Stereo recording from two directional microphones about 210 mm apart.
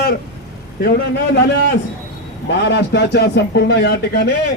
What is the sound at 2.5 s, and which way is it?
A man's voice, 55° left (ahead or behind).